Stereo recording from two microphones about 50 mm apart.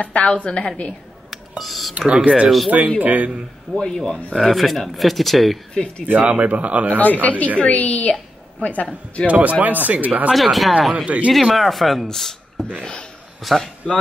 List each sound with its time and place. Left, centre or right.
0.0 s a woman's voice: left
1.6 s speech: centre
2.0 s speech: right
3.0 s speech: right
3.7 s speech: centre
6.0 s speech: right
6.9 s a woman's voice: left
9.3 s speech: right
10.3 s speech: centre
11.1 s speech: right
11.3 s speech: centre
13.4 s a man's voice: centre